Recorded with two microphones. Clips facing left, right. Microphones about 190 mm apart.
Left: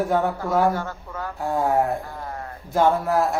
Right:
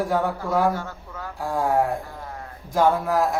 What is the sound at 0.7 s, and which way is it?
Speech, 55° left (ahead or behind).